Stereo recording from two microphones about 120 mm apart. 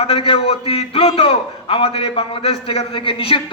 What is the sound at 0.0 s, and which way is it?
A man's voice, 50° left (ahead or behind).